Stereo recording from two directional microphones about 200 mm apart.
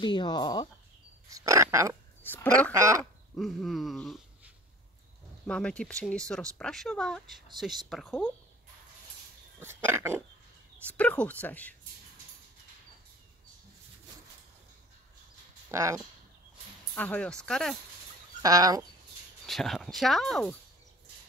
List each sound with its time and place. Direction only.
0.0 s speech: 20° left (ahead or behind)
1.3 s speech: 15° right (ahead or behind)
2.2 s speech: 10° left (ahead or behind)
2.7 s speech: 15° right (ahead or behind)
3.3 s speech: centre (ahead or behind)
5.5 s speech: 5° left (ahead or behind)
9.6 s a sound: 10° right (ahead or behind)
10.9 s speech: 5° left (ahead or behind)
15.7 s speech: 15° right (ahead or behind)
16.9 s speech: 10° left (ahead or behind)
18.4 s speech: 20° right (ahead or behind)
19.4 s speech: centre (ahead or behind)